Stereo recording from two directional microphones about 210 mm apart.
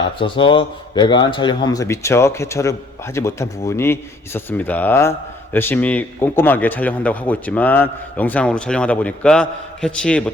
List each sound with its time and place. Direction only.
0.2 s a man's voice: 25° left (ahead or behind); by 10.3 s 5° left (ahead or behind)